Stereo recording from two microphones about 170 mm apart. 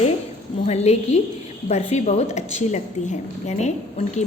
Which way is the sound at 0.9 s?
40° left (ahead or behind).